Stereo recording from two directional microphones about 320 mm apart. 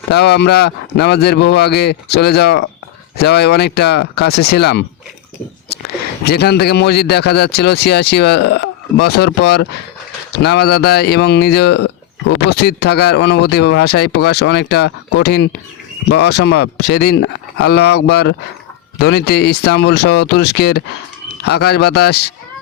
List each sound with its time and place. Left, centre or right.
0.1 s speech: left
6.2 s speech: left